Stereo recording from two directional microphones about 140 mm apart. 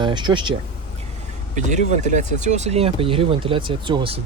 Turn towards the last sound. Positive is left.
turn(degrees=-40)  # may be behind; listen again after turning